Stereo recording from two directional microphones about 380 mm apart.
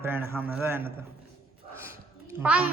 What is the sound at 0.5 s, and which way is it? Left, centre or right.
Speech, centre.